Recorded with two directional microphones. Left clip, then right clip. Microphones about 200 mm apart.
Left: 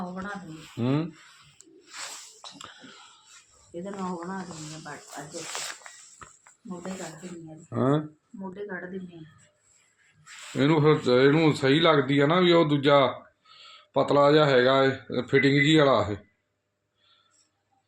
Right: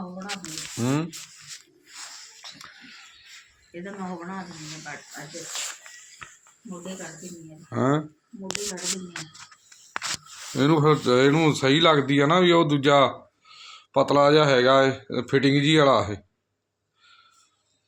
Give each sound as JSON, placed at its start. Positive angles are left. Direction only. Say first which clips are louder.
{"t": 0.8, "sound": "sizzle", "louder": "right 1 dB", "side_deg": -5}
{"t": 3.7, "sound": "speech", "louder": "left 1 dB", "side_deg": -10}
{"t": 5.4, "sound": "speech", "louder": "right 2 dB", "side_deg": 50}
{"t": 7.0, "sound": "speech", "louder": "even", "side_deg": 40}
{"t": 7.7, "sound": "speech", "louder": "right 2 dB", "side_deg": 0}
{"t": 10.6, "sound": "speech", "louder": "right 2 dB", "side_deg": -10}